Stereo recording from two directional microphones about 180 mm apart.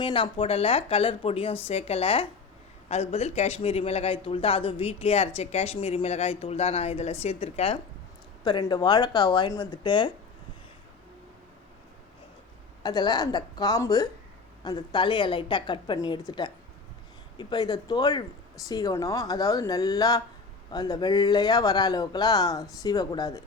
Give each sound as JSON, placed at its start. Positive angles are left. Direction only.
{"t": 0.0, "sound": "a man's voice", "side_deg": 30}
{"t": 12.8, "sound": "speech", "side_deg": 25}